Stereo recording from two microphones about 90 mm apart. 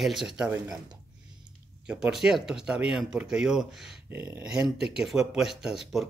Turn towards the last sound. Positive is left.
turn(degrees=0)  # may be behind; listen again after turning